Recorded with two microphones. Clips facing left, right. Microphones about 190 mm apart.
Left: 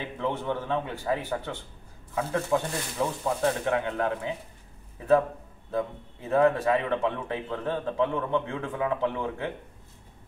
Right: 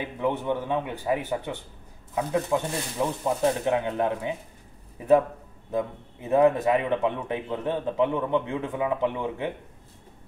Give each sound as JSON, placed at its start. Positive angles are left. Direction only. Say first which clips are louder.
{"t": 0.2, "sound": "a man's voice", "louder": "right 3 dB", "side_deg": -15}